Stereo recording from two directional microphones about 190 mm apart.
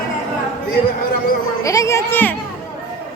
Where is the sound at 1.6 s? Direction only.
15° left (ahead or behind).